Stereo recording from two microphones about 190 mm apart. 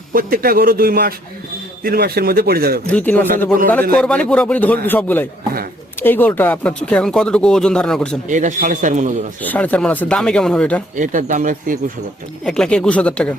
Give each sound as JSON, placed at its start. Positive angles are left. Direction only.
{"t": 0.1, "sound": "a man's voice", "side_deg": -50}
{"t": 2.9, "sound": "speech", "side_deg": 10}
{"t": 8.3, "sound": "a man's voice", "side_deg": -40}
{"t": 9.4, "sound": "speech", "side_deg": 10}
{"t": 10.9, "sound": "a man's voice", "side_deg": -40}
{"t": 12.5, "sound": "speech", "side_deg": 5}